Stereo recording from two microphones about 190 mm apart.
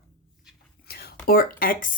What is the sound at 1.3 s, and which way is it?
Speech, 50° left (ahead or behind).